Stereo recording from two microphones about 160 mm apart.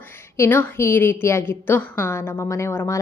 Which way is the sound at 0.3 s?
15° left (ahead or behind).